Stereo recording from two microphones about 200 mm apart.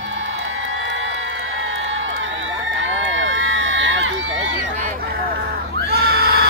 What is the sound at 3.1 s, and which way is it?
Run, 70° right (ahead or behind).